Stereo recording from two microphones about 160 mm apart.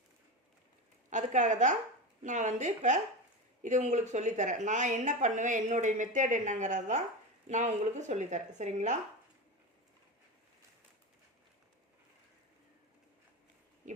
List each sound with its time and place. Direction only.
1.1 s a woman's voice: 50° right (ahead or behind)